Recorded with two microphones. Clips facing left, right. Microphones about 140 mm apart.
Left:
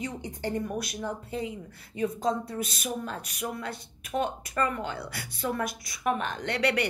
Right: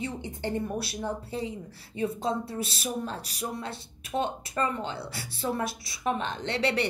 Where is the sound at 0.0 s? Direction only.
25° right (ahead or behind).